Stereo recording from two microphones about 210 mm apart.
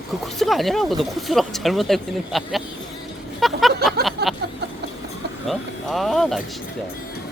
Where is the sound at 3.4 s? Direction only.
Centre (ahead or behind).